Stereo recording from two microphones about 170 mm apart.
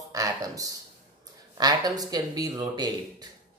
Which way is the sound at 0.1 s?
20° right (ahead or behind).